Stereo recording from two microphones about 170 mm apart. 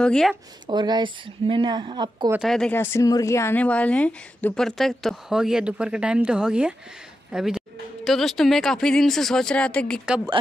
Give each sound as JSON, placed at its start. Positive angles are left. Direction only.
{"t": 0.0, "sound": "speech", "side_deg": 5}
{"t": 0.7, "sound": "speech", "side_deg": -25}
{"t": 2.3, "sound": "speech", "side_deg": 0}